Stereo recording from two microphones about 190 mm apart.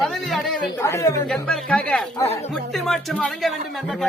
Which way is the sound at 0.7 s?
15° left (ahead or behind).